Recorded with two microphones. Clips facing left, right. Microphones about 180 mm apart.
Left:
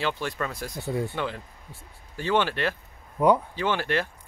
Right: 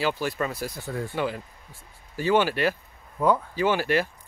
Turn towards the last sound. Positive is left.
turn(degrees=-10)  # may be behind; listen again after turning